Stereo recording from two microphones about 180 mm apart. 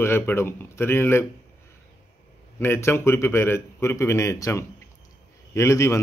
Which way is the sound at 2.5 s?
15° left (ahead or behind).